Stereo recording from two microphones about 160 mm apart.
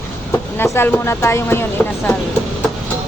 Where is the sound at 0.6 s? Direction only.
15° left (ahead or behind).